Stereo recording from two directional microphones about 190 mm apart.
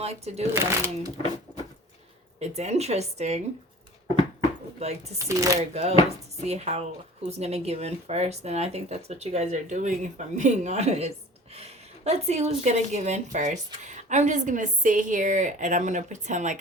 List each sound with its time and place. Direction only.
0.0 s speech: 35° right (ahead or behind)
0.5 s speech: 15° right (ahead or behind)
1.5 s a sound: 5° right (ahead or behind)
2.6 s speech: 35° right (ahead or behind)
4.8 s speech: 35° right (ahead or behind)
5.2 s speech: 15° right (ahead or behind)
5.5 s speech: 35° right (ahead or behind)